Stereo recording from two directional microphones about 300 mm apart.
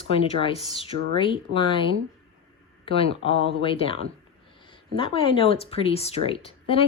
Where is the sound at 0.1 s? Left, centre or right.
Centre.